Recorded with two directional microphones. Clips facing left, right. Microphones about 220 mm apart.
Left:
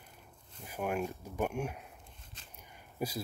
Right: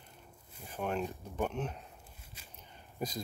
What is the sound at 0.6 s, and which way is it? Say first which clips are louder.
Speech: left 1 dB; 10° left (ahead or behind).